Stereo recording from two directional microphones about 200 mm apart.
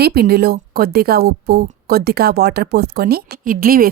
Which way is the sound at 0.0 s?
50° right (ahead or behind).